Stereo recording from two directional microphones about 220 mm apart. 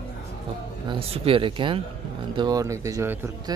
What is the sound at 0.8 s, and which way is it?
Speech, 25° right (ahead or behind).